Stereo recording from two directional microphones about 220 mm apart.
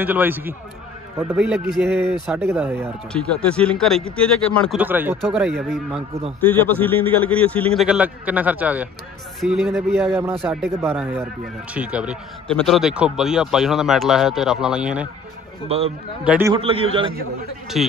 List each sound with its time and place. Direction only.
0.0 s speech: 10° right (ahead or behind)
3.1 s speech: 5° left (ahead or behind)
4.7 s speech: 10° right (ahead or behind)
5.2 s a man's voice: centre (ahead or behind)
15.7 s a man's voice: 25° right (ahead or behind)
16.3 s speech: 10° right (ahead or behind)
16.5 s a man's voice: 25° right (ahead or behind)
17.8 s speech: centre (ahead or behind)